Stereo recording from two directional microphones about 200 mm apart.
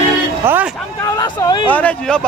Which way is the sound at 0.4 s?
10° right (ahead or behind).